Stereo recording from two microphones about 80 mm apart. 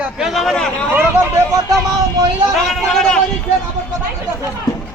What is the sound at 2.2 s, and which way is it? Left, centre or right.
Speech, right.